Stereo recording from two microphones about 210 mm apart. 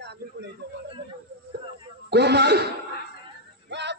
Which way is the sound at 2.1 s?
55° right (ahead or behind).